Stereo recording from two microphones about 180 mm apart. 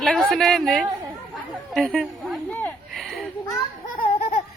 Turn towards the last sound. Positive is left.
turn(degrees=50)  # may be behind; listen again after turning